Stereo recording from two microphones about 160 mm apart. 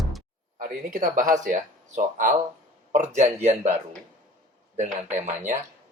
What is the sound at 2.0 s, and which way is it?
Speech, 55° right (ahead or behind).